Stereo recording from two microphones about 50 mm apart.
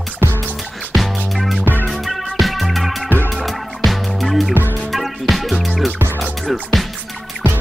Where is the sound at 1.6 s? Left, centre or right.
Right.